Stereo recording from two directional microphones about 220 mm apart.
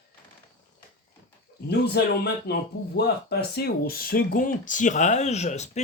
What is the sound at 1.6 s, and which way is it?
Speech, 50° left (ahead or behind).